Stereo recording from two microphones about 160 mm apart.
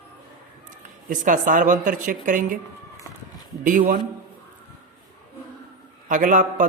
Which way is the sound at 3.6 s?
60° right (ahead or behind).